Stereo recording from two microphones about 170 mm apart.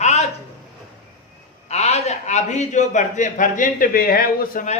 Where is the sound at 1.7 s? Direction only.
40° left (ahead or behind).